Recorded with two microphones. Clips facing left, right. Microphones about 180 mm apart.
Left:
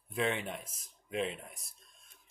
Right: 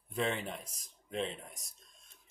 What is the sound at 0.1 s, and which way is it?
Speech, centre (ahead or behind).